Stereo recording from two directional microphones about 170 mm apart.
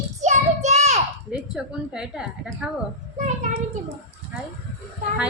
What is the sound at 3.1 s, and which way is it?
Speech, 45° right (ahead or behind).